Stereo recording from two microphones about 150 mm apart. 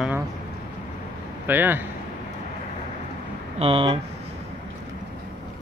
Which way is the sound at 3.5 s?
40° right (ahead or behind).